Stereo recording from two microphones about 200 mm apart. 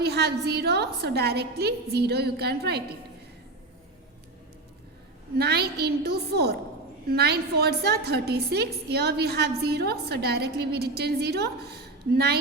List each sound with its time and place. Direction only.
0.0 s a woman's voice: 55° right (ahead or behind)
5.4 s a woman's voice: 55° right (ahead or behind)